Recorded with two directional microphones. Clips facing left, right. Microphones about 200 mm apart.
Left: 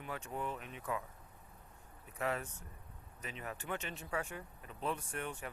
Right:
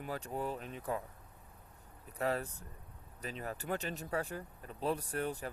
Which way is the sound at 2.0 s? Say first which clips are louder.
Right 3 dB; 35° right (ahead or behind).